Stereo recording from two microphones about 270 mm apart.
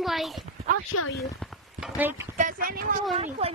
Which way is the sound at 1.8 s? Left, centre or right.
Centre.